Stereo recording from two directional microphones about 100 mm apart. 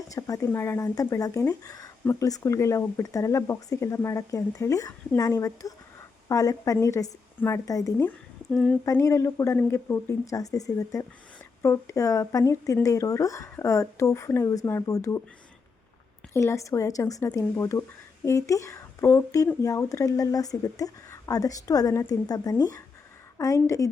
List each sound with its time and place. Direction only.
0.1 s speech: 35° left (ahead or behind)
8.4 s speech: 5° left (ahead or behind)
8.8 s speech: 30° left (ahead or behind)
16.3 s speech: 30° left (ahead or behind)